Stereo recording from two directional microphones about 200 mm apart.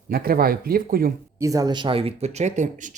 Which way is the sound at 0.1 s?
50° right (ahead or behind).